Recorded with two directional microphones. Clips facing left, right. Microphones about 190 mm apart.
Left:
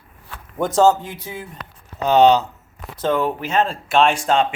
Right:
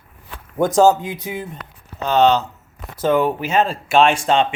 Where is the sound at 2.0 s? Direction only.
15° left (ahead or behind).